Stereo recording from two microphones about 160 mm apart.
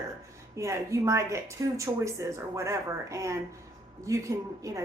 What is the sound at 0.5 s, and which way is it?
A woman's voice, 20° right (ahead or behind).